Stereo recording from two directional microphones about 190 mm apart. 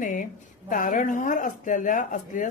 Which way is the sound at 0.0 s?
45° left (ahead or behind).